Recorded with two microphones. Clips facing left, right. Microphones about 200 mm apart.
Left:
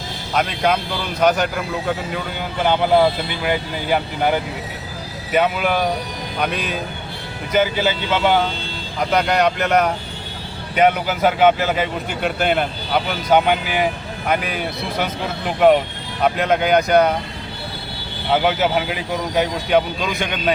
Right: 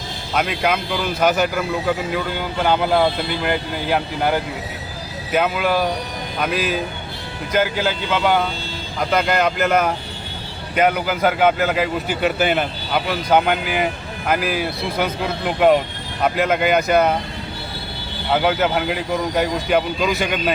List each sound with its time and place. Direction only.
0.3 s speech: 5° right (ahead or behind)
3.4 s speech: centre (ahead or behind)
16.2 s speech: centre (ahead or behind)
18.3 s speech: centre (ahead or behind)